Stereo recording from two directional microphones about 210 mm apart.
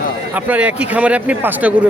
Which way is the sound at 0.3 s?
5° right (ahead or behind).